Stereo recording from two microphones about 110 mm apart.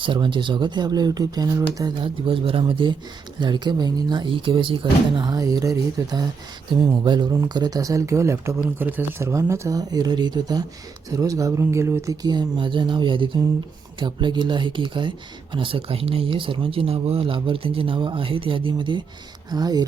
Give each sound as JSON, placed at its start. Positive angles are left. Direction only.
{"t": 0.0, "sound": "speech", "side_deg": -50}
{"t": 2.0, "sound": "speech", "side_deg": -50}
{"t": 12.2, "sound": "speech", "side_deg": -40}